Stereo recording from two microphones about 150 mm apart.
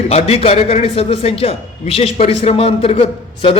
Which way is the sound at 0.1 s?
45° left (ahead or behind).